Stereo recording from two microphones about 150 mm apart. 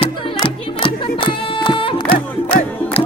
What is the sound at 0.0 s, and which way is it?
Music, 35° left (ahead or behind).